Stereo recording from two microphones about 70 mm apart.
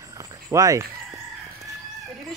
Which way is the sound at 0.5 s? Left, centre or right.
Right.